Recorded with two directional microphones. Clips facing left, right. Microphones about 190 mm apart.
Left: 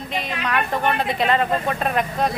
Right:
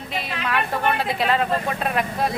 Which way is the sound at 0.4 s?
5° right (ahead or behind).